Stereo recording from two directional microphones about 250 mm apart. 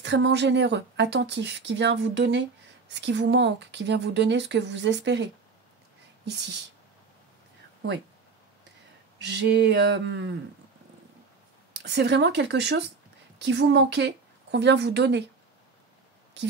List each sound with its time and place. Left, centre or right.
0.0 s speech: right
9.2 s speech: right
11.7 s a woman's voice: right